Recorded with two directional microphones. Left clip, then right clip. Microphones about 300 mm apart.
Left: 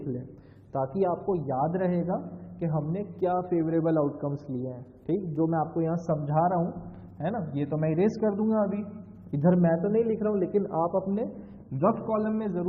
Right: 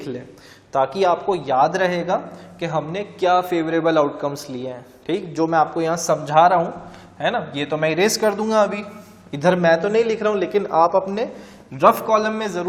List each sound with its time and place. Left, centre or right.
0.7 s a man's voice: centre
4.4 s a man's voice: centre